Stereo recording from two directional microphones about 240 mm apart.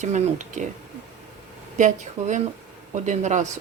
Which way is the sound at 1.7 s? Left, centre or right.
Right.